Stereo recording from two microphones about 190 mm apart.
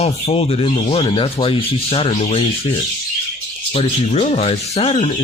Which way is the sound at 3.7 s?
30° left (ahead or behind).